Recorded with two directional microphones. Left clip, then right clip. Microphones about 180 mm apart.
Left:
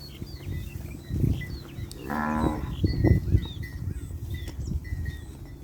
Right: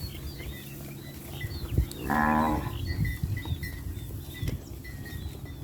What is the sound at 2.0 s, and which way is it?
Livestock, 45° right (ahead or behind).